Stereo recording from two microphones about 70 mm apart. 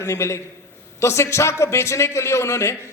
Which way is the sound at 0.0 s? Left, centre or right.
Left.